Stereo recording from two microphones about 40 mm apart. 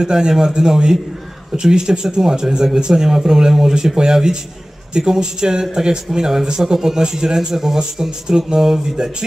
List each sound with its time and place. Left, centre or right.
0.0 s speech: centre